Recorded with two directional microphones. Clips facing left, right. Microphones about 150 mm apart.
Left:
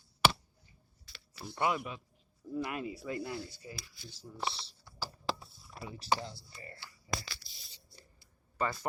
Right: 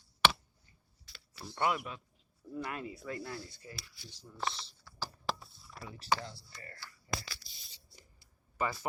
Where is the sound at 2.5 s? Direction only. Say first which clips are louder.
Left 3 dB; 15° left (ahead or behind).